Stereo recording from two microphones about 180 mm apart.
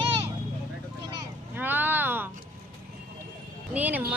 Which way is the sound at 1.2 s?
10° right (ahead or behind).